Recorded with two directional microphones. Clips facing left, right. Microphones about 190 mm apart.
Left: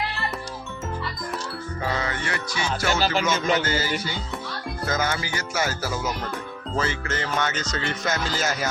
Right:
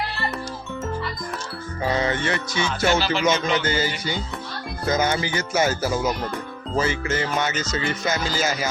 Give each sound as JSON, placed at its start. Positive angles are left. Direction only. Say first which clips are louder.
{"t": 2.0, "sound": "speech", "louder": "right 5 dB", "side_deg": -25}
{"t": 3.0, "sound": "music", "louder": "even", "side_deg": 45}
{"t": 3.6, "sound": "speech", "louder": "right 1 dB", "side_deg": -20}
{"t": 6.7, "sound": "music", "louder": "right 4 dB", "side_deg": -10}